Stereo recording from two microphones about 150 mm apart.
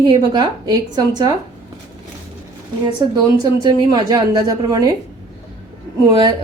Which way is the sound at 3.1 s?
30° right (ahead or behind).